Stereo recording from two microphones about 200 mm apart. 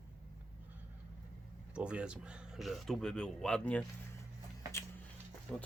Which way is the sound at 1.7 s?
5° right (ahead or behind).